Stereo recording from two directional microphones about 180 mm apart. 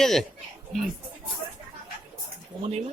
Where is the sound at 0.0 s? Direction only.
Centre (ahead or behind).